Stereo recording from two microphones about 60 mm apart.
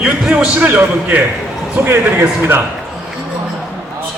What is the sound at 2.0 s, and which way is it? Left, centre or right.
Speech, right.